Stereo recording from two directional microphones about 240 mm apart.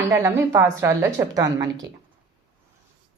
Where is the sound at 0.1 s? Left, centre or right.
Centre.